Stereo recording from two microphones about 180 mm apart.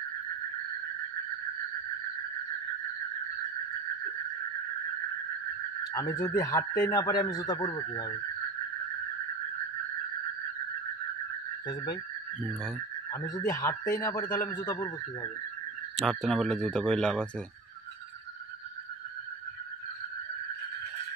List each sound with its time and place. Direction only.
5.9 s speech: 20° left (ahead or behind)
11.6 s speech: 25° left (ahead or behind)
13.1 s speech: 20° left (ahead or behind)
16.0 s a man's voice: centre (ahead or behind)